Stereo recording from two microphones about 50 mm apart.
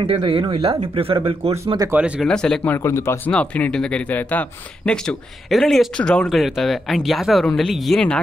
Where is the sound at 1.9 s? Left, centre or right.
Right.